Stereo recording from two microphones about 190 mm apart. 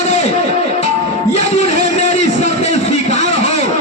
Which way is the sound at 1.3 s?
35° left (ahead or behind).